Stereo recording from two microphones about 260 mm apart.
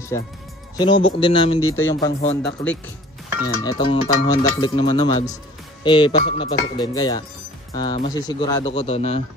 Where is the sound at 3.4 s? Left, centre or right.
Centre.